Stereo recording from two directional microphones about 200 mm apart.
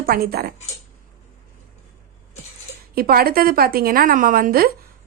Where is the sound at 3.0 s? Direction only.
50° right (ahead or behind).